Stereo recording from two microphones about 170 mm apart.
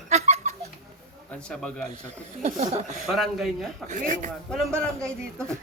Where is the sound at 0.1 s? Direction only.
40° right (ahead or behind).